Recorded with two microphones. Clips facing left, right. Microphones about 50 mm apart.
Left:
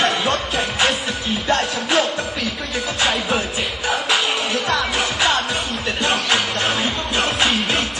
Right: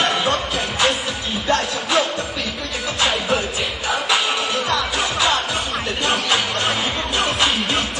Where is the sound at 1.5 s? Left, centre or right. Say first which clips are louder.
Even; left.